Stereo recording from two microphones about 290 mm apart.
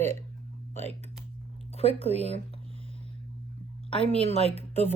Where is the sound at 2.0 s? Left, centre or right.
Right.